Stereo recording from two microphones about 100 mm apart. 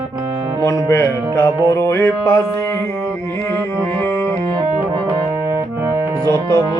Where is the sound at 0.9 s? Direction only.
30° left (ahead or behind).